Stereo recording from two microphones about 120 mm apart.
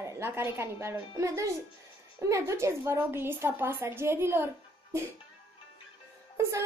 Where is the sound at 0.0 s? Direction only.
20° right (ahead or behind).